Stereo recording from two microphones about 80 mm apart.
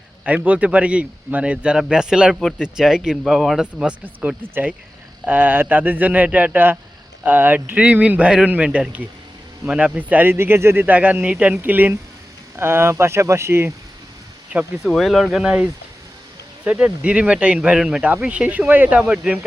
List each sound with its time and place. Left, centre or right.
0.3 s speech: centre
10.8 s speech: centre
14.8 s speech: centre